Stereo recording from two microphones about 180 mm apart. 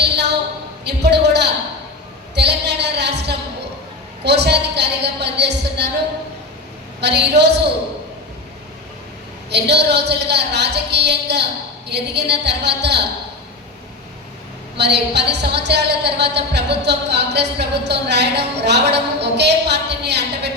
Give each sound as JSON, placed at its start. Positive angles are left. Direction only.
{"t": 0.9, "sound": "a sound", "side_deg": -70}
{"t": 4.2, "sound": "a woman's voice", "side_deg": -70}
{"t": 7.0, "sound": "a woman's voice", "side_deg": -70}
{"t": 9.5, "sound": "a woman's voice", "side_deg": -70}
{"t": 14.8, "sound": "a woman's voice", "side_deg": -70}